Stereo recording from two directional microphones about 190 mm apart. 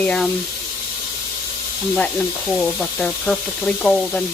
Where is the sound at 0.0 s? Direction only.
5° left (ahead or behind).